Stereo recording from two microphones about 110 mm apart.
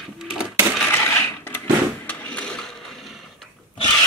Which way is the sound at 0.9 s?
20° left (ahead or behind).